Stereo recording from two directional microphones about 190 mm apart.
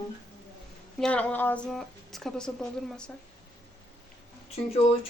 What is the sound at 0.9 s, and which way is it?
Speech, 5° left (ahead or behind).